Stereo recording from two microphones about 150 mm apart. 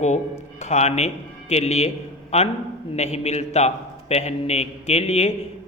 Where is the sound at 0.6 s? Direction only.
50° left (ahead or behind).